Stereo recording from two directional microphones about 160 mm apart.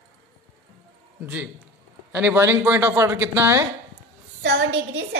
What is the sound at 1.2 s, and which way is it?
Speech, 10° right (ahead or behind).